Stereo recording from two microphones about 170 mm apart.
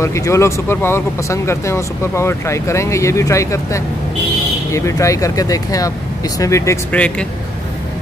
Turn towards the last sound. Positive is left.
turn(degrees=10)  # may be behind; listen again after turning